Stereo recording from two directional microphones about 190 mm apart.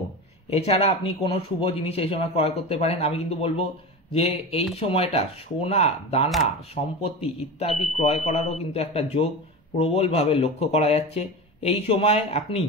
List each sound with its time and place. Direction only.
0.5 s speech: 30° left (ahead or behind)